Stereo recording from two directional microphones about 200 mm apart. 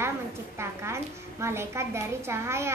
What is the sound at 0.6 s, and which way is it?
A woman's voice, 15° right (ahead or behind).